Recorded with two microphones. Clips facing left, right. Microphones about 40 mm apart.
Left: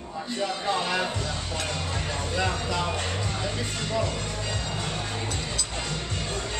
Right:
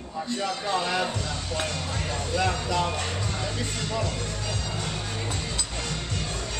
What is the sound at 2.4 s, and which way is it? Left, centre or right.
Speech, centre.